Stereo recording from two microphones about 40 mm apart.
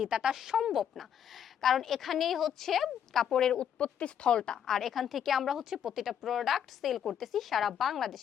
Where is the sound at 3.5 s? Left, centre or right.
Left; by 4.9 s centre.